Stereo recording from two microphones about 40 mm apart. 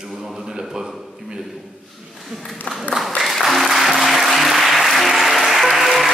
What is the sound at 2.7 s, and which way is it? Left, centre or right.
Speech, left.